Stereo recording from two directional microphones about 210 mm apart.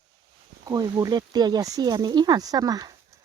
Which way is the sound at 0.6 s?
20° right (ahead or behind).